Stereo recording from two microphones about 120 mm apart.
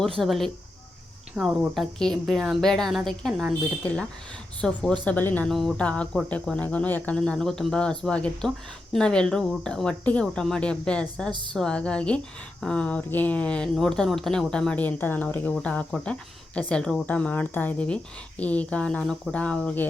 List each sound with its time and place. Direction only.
0.2 s speech: centre (ahead or behind)
4.6 s speech: 5° left (ahead or behind)
5.5 s speech: 5° left (ahead or behind)
11.3 s a woman's voice: 40° right (ahead or behind)
11.5 s speech: 5° left (ahead or behind)